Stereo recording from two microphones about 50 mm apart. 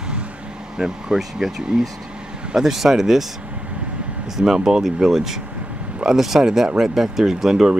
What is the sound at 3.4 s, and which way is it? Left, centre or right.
Vehicle, right.